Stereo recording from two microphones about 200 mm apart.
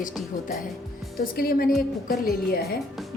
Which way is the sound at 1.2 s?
50° left (ahead or behind).